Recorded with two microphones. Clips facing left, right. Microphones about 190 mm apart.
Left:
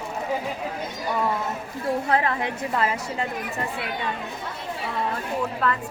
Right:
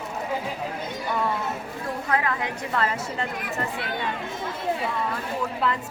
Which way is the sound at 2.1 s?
30° left (ahead or behind).